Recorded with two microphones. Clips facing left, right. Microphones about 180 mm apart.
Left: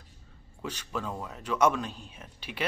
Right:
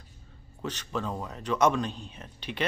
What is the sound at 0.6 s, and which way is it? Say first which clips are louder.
Speech: right 2 dB; 10° left (ahead or behind).